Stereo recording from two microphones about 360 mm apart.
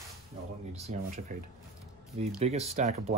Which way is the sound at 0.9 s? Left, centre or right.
Right.